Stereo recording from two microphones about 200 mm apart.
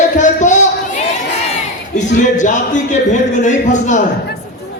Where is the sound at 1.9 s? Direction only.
40° left (ahead or behind).